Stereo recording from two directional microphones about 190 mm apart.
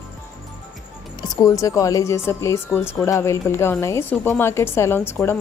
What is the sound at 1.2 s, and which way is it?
A woman's voice, 20° left (ahead or behind).